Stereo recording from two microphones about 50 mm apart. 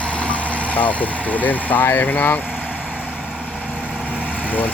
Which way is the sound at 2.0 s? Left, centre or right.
Left.